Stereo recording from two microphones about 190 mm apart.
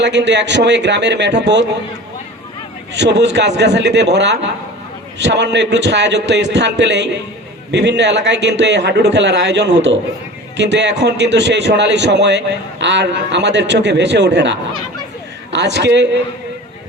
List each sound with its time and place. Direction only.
0.0 s a man's voice: 65° right (ahead or behind)
2.9 s a man's voice: 65° right (ahead or behind)